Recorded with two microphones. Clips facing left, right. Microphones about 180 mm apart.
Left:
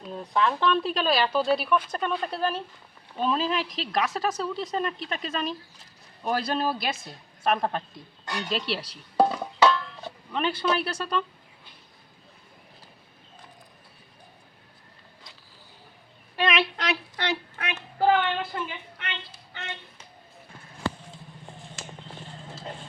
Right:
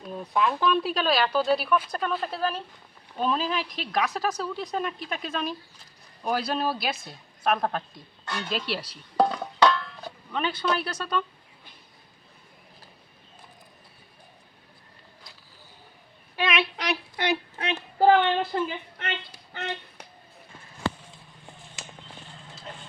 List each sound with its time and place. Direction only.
0.0 s speech: 5° right (ahead or behind)
8.2 s speech: 15° left (ahead or behind)
8.4 s dishes: centre (ahead or behind)
16.3 s a woman's voice: 5° right (ahead or behind)
17.6 s speech: 30° right (ahead or behind)